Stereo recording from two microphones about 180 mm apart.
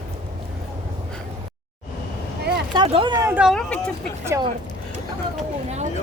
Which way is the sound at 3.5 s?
5° left (ahead or behind).